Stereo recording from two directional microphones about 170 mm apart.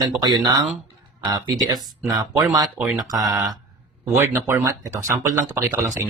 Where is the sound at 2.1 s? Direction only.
25° right (ahead or behind).